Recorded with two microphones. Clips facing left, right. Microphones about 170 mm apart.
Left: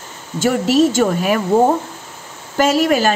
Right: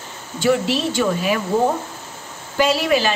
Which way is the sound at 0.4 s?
45° left (ahead or behind).